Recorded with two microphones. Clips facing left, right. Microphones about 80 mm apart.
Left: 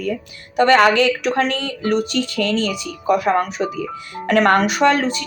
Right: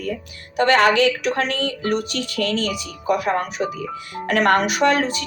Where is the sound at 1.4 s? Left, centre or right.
Left.